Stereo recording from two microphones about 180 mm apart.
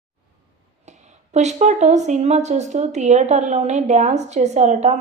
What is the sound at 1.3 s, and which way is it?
A woman's voice, 40° right (ahead or behind).